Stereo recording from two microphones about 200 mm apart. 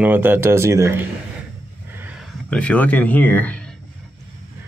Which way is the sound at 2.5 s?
5° left (ahead or behind).